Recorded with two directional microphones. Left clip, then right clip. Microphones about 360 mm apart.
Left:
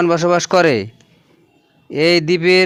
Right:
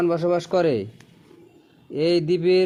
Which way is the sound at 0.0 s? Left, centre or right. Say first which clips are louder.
Left 7 dB; left.